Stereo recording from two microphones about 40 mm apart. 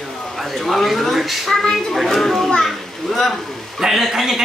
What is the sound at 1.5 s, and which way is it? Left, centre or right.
A woman's voice, centre.